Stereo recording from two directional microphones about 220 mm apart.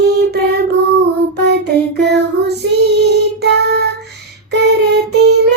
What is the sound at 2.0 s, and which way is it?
Child singing, 50° right (ahead or behind).